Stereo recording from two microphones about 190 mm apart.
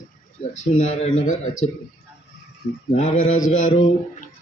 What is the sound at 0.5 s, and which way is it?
Speech, 40° left (ahead or behind).